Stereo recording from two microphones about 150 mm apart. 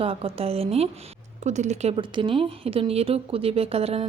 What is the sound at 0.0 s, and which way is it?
Speech, 40° right (ahead or behind).